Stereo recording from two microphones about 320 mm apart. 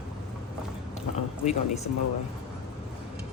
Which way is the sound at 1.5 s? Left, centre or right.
Left.